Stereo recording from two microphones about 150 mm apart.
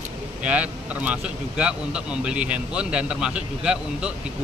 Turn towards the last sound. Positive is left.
turn(degrees=-5)  # may be behind; listen again after turning